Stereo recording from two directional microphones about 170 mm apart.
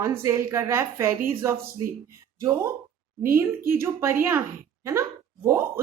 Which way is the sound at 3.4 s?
15° right (ahead or behind).